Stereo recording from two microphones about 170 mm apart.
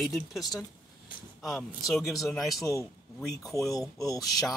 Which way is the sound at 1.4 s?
Centre (ahead or behind).